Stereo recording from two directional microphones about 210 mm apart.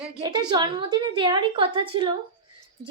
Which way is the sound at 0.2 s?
20° right (ahead or behind).